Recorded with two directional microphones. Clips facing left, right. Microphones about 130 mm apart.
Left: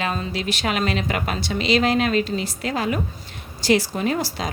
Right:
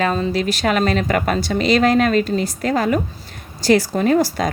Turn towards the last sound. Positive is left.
turn(degrees=-45)  # may be behind; listen again after turning